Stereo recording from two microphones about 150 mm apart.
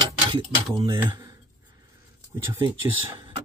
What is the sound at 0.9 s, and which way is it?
Speech, 25° right (ahead or behind).